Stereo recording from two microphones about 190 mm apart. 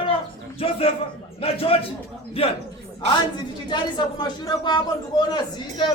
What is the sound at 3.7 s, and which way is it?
A woman's voice, 20° left (ahead or behind).